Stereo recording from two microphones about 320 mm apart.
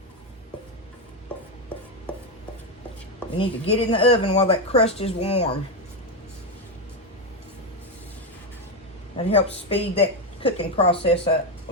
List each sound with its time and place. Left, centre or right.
2.1 s chopping: centre
3.3 s speech: centre
9.1 s speech: centre